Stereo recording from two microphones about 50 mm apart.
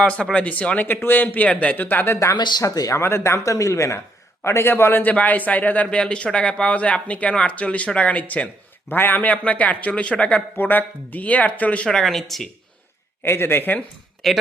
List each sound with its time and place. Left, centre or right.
0.0 s speech: left
0.9 s speech: left
2.0 s speech: left
4.4 s a man's voice: left
4.7 s speech: left
5.1 s speech: left
10.6 s speech: left
11.9 s speech: centre
13.2 s speech: left
14.2 s speech: centre